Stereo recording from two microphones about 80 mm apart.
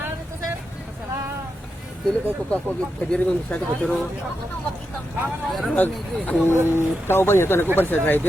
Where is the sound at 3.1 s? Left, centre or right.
Centre.